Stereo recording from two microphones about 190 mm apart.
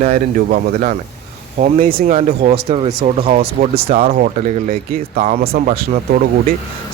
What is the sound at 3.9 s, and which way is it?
Speech, 45° right (ahead or behind).